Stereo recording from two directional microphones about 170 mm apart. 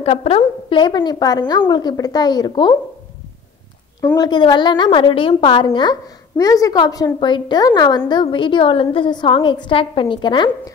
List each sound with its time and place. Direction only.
0.0 s a woman's voice: 35° left (ahead or behind)
4.0 s a woman's voice: 20° left (ahead or behind)